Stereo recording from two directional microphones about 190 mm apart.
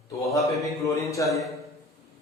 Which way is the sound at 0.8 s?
15° left (ahead or behind).